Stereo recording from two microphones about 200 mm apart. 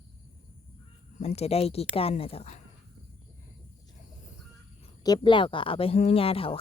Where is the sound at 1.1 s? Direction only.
30° left (ahead or behind).